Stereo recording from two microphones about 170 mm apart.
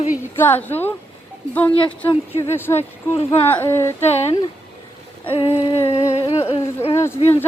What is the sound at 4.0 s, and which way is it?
Speech, 40° left (ahead or behind).